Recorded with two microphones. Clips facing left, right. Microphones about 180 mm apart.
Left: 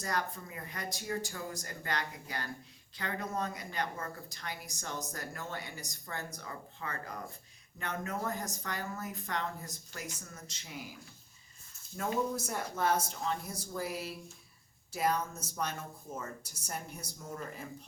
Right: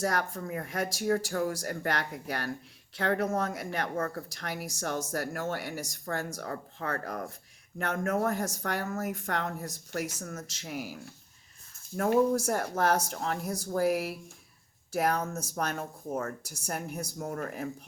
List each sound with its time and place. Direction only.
0.0 s speech: 75° right (ahead or behind)
11.9 s speech: 60° right (ahead or behind)